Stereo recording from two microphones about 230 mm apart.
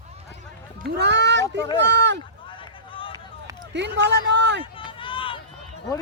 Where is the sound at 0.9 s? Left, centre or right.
Right.